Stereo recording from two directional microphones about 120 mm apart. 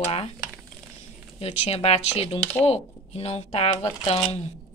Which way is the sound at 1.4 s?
60° left (ahead or behind).